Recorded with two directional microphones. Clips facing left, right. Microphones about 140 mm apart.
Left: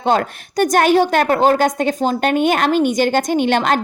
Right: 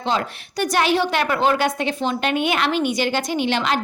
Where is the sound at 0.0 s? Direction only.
50° left (ahead or behind).